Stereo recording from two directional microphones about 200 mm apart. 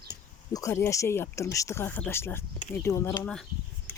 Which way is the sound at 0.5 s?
15° left (ahead or behind).